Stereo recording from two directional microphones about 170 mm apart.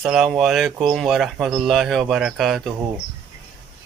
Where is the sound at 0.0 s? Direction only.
5° right (ahead or behind).